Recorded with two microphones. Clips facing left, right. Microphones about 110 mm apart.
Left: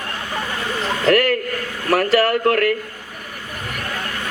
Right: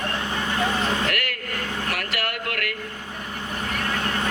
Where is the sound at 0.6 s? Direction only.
25° right (ahead or behind).